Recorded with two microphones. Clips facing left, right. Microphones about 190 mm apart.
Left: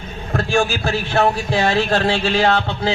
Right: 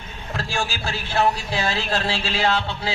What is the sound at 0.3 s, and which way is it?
A man's voice, 60° left (ahead or behind).